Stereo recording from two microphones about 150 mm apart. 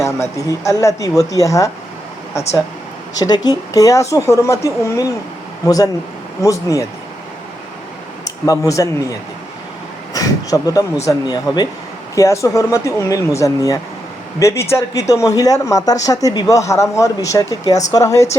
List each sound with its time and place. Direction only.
0.0 s speech: 20° left (ahead or behind)
3.2 s speech: 25° left (ahead or behind)
8.2 s speech: 20° left (ahead or behind)
10.2 s a sound: 25° left (ahead or behind)
11.0 s speech: 25° left (ahead or behind)